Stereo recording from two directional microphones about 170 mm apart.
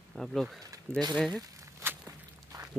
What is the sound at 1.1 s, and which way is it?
Speech, centre (ahead or behind).